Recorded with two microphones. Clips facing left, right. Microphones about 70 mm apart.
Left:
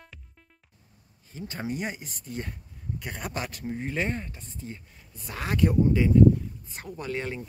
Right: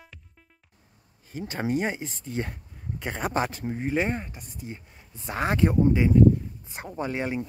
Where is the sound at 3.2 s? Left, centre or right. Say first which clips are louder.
Right 9 dB; right.